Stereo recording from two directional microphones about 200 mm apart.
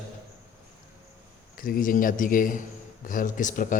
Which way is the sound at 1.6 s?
45° left (ahead or behind).